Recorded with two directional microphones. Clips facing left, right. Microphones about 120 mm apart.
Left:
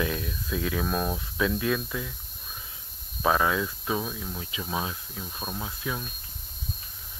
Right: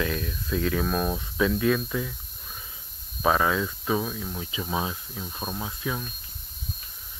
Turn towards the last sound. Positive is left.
turn(degrees=0)  # may be behind; listen again after turning